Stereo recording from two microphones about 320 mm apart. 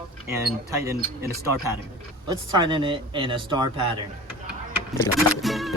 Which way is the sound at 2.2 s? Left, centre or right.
Centre.